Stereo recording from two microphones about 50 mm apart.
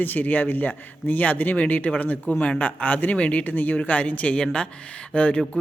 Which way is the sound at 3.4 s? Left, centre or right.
Left.